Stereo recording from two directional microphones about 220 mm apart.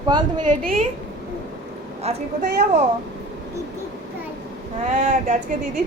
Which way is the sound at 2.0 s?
30° right (ahead or behind).